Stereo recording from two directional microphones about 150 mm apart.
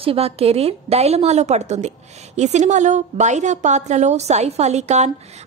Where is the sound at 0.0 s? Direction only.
40° right (ahead or behind).